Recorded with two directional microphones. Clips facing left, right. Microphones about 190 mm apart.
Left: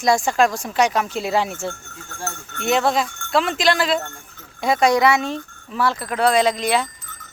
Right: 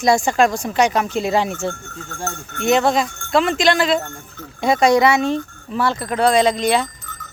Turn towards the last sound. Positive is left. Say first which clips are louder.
# right 2 dB
turn(degrees=0)  # may be behind; listen again after turning